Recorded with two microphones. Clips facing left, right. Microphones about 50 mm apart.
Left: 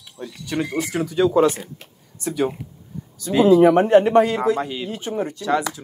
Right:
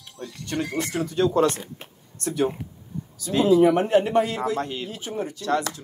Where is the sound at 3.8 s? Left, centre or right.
Left.